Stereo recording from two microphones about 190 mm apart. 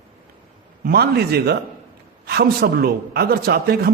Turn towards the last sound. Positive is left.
turn(degrees=-55)  # may be behind; listen again after turning